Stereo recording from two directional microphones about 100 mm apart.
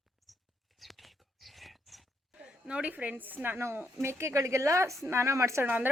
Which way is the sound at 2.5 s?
10° right (ahead or behind).